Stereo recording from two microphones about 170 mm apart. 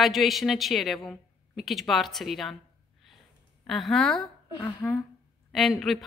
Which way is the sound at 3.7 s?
Centre (ahead or behind).